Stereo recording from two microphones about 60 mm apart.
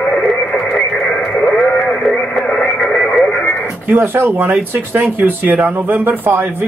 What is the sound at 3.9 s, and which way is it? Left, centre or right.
A man's voice, right.